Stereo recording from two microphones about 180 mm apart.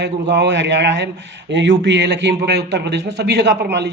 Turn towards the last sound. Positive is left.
turn(degrees=-70)  # may be behind; listen again after turning